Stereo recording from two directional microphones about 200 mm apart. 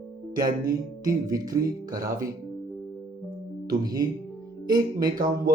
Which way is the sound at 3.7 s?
20° right (ahead or behind).